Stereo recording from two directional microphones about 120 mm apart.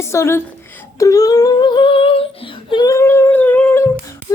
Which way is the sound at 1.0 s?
30° left (ahead or behind).